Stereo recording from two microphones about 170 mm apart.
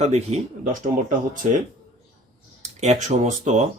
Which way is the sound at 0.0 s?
40° right (ahead or behind).